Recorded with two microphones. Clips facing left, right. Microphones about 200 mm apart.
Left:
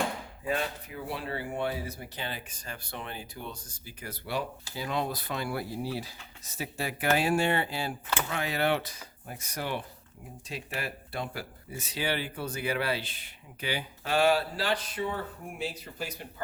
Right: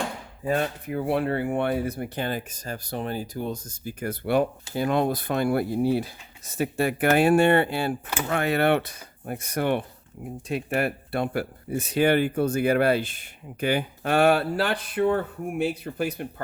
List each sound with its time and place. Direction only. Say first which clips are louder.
0.4 s speech: right 6 dB; 45° right (ahead or behind)